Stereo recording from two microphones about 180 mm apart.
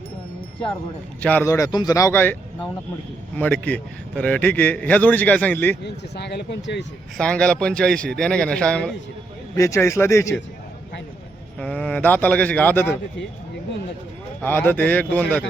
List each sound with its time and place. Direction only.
1.2 s a man's voice: 10° left (ahead or behind)
5.8 s speech: 65° left (ahead or behind)
7.2 s speech: 5° left (ahead or behind)
9.6 s a man's voice: 15° left (ahead or behind)
11.6 s a man's voice: 5° left (ahead or behind)
14.4 s a man's voice: 10° left (ahead or behind)